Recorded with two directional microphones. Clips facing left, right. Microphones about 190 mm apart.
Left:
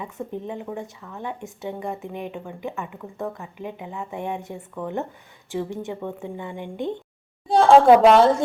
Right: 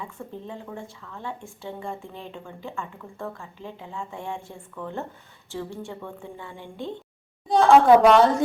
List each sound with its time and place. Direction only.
0.0 s a woman's voice: 20° left (ahead or behind)